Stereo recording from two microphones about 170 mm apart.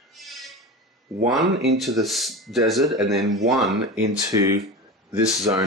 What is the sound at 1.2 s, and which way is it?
Speech, centre (ahead or behind).